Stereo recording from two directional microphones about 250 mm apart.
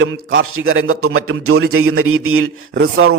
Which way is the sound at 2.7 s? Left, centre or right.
Right.